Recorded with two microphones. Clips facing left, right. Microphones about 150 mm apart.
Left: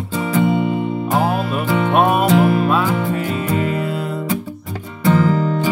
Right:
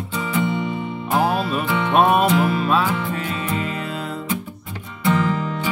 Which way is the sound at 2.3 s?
60° left (ahead or behind).